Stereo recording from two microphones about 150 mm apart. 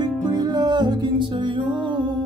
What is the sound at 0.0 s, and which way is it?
Music, 25° right (ahead or behind).